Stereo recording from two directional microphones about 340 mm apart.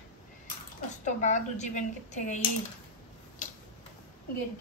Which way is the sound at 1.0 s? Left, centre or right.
Left.